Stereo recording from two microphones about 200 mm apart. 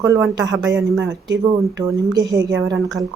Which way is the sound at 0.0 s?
15° right (ahead or behind).